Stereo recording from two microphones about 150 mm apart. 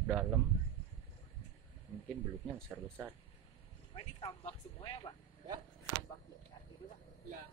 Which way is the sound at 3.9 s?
35° left (ahead or behind).